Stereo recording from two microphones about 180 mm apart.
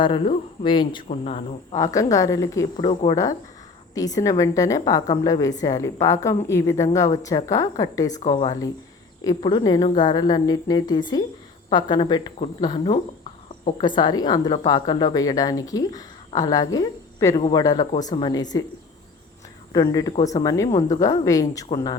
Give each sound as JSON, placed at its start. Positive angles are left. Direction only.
{"t": 0.0, "sound": "a woman's voice", "side_deg": 30}
{"t": 1.7, "sound": "a woman's voice", "side_deg": 20}
{"t": 19.7, "sound": "a woman's voice", "side_deg": 20}